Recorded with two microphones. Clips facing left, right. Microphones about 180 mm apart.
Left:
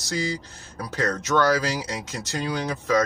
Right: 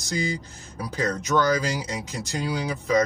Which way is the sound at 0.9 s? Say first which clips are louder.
Even; 70° left (ahead or behind).